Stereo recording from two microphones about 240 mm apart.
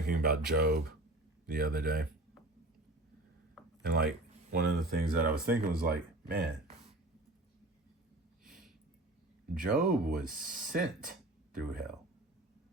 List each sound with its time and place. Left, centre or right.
0.0 s speech: right
3.8 s speech: right
9.6 s speech: right